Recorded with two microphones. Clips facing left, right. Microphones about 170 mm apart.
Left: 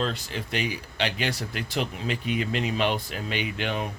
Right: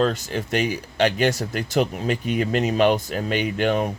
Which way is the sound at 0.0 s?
45° right (ahead or behind).